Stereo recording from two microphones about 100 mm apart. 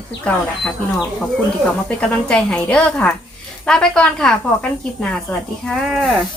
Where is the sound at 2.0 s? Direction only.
10° left (ahead or behind).